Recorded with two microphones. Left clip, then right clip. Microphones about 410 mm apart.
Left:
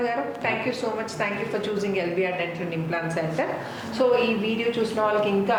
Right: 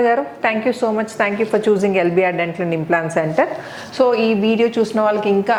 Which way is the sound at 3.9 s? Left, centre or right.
Right.